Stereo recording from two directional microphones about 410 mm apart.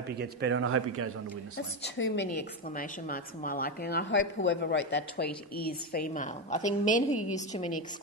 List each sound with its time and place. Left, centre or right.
0.2 s speech: right
1.6 s a woman's voice: left